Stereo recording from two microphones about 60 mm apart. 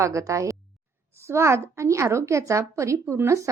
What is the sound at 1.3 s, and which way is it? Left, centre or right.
Speech, right.